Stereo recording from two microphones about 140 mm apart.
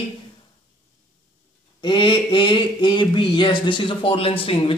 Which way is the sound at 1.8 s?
35° left (ahead or behind).